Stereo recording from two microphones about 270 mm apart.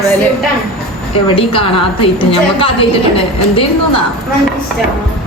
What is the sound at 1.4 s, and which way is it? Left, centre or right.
Speech, centre.